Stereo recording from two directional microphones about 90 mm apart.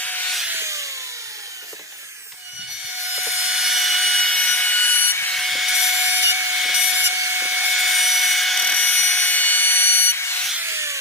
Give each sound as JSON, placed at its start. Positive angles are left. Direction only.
{"t": 0.0, "sound": "a sound", "side_deg": 20}
{"t": 0.5, "sound": "a sound", "side_deg": -35}
{"t": 3.2, "sound": "wood", "side_deg": -10}
{"t": 5.3, "sound": "wood", "side_deg": 0}
{"t": 6.6, "sound": "wood", "side_deg": -5}
{"t": 7.2, "sound": "tools", "side_deg": -25}
{"t": 7.7, "sound": "wood", "side_deg": 0}
{"t": 10.6, "sound": "rub", "side_deg": -30}